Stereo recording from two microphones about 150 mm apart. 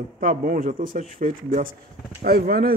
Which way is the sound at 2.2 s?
80° right.